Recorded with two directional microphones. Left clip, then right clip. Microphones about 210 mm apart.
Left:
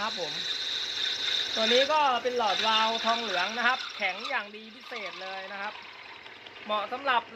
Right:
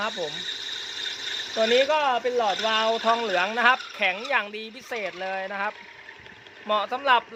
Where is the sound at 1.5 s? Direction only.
45° right (ahead or behind).